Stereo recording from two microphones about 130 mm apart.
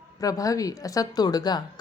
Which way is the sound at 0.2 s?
25° left (ahead or behind).